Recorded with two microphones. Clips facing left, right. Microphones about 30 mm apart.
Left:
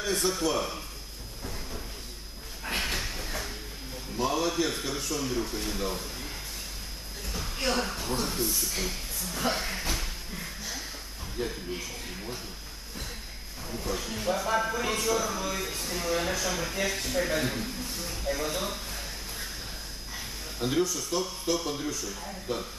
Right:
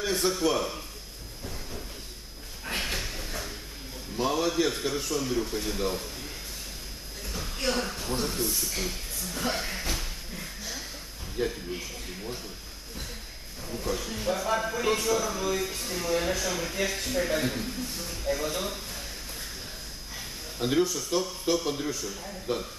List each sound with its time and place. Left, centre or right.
0.0 s speech: centre
0.6 s speech: centre
1.4 s train: centre
2.6 s a sound: centre
4.2 s speech: centre
7.2 s a sound: centre
11.3 s speech: centre
13.7 s speech: centre
20.6 s speech: centre
22.5 s speech: centre